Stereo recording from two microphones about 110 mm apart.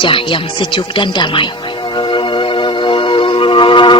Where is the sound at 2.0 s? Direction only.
45° left (ahead or behind).